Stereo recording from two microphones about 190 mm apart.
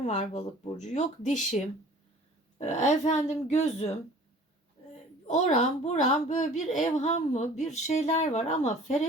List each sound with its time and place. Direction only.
0.0 s a woman's voice: 40° left (ahead or behind)
2.6 s a woman's voice: 40° left (ahead or behind)
5.3 s a woman's voice: 40° left (ahead or behind)